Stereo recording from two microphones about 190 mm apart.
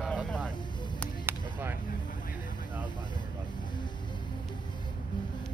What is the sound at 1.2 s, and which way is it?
Music, 10° right (ahead or behind).